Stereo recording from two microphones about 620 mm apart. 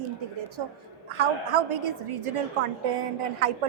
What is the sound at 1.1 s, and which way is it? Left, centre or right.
A woman's voice, right.